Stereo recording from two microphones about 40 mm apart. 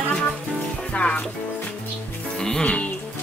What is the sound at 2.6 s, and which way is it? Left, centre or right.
Speech, left.